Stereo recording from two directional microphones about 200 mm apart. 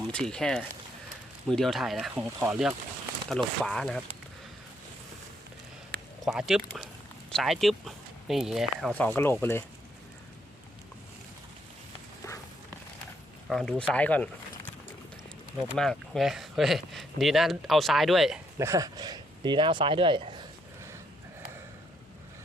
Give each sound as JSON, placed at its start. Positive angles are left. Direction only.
{"t": 0.1, "sound": "speech", "side_deg": 5}
{"t": 6.2, "sound": "speech", "side_deg": 0}
{"t": 13.5, "sound": "speech", "side_deg": 0}
{"t": 15.7, "sound": "speech", "side_deg": 0}
{"t": 18.6, "sound": "speech", "side_deg": -15}